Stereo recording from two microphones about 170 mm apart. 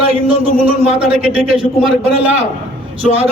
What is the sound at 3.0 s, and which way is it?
Speech, 35° right (ahead or behind).